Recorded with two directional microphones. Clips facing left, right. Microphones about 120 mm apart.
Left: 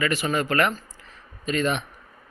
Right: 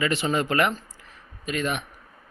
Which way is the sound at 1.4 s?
5° right (ahead or behind).